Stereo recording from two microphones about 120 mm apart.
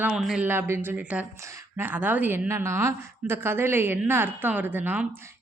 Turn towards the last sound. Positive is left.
turn(degrees=-15)  # may be behind; listen again after turning